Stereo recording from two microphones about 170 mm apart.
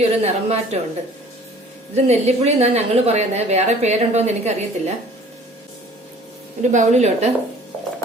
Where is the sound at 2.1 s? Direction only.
40° right (ahead or behind).